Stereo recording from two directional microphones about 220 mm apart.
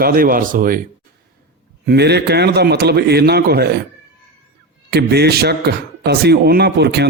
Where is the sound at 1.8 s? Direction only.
45° right (ahead or behind).